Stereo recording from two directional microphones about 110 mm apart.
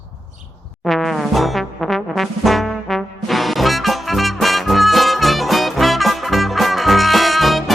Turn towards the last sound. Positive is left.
turn(degrees=0)  # may be behind; listen again after turning